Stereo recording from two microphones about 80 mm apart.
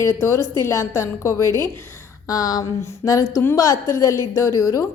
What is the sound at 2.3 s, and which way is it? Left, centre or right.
A woman's voice, left.